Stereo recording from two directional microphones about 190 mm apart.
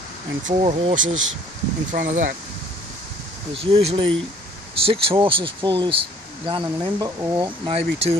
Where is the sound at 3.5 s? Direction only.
30° right (ahead or behind).